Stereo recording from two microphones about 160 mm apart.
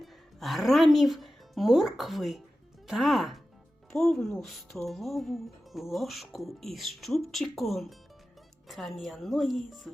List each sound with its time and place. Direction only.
0.0 s speech: centre (ahead or behind)